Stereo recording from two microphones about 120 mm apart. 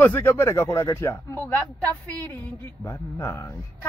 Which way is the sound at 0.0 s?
15° left (ahead or behind).